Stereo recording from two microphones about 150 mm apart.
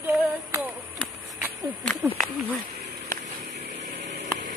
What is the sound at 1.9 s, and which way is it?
Speech, centre (ahead or behind).